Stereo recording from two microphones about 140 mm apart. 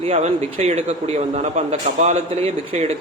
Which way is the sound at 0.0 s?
50° right (ahead or behind).